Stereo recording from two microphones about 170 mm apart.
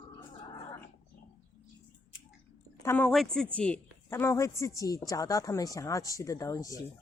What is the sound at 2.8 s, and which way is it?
A woman's voice, 10° left (ahead or behind).